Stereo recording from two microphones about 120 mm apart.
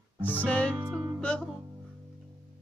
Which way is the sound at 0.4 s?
10° left (ahead or behind).